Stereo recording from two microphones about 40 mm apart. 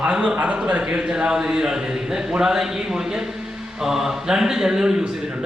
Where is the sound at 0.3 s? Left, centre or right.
Right.